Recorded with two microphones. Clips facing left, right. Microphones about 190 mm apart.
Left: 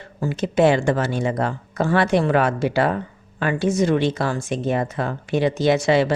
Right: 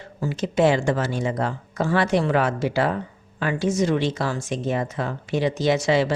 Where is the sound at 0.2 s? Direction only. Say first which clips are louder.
Left 2 dB; 55° left (ahead or behind).